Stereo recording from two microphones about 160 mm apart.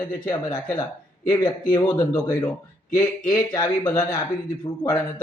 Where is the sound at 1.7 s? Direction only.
25° left (ahead or behind).